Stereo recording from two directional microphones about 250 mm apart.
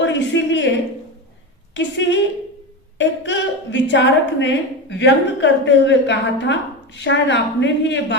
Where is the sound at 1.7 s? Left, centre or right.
Left.